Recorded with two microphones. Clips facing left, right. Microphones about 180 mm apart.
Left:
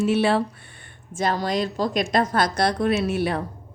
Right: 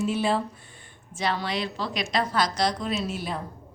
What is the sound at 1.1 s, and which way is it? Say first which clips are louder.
A woman's voice: left 5 dB; 45° left (ahead or behind).